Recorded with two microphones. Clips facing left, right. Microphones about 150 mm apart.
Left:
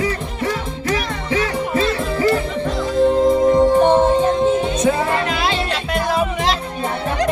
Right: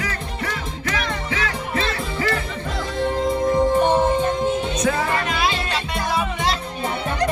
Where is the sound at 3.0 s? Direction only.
25° left (ahead or behind).